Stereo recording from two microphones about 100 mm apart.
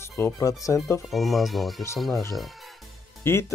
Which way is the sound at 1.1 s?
Centre (ahead or behind).